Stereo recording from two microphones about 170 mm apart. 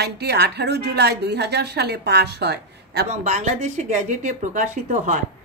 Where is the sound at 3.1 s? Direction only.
40° right (ahead or behind).